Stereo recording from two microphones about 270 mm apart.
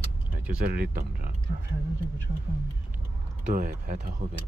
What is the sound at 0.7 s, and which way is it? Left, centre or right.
Speech, right.